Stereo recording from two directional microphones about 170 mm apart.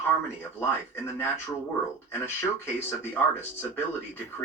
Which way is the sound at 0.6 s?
15° left (ahead or behind).